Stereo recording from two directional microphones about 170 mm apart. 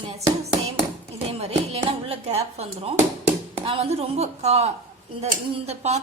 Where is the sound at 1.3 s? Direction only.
40° right (ahead or behind).